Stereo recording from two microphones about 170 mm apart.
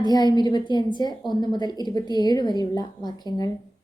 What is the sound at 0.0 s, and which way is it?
A woman's voice, 25° left (ahead or behind).